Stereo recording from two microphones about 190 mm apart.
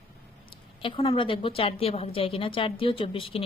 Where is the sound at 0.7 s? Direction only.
25° left (ahead or behind).